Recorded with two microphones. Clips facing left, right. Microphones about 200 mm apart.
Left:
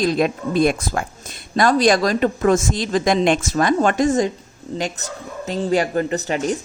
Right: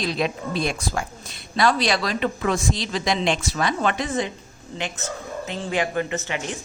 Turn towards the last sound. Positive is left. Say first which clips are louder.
# left 7 dB
turn(degrees=40)  # may be behind; listen again after turning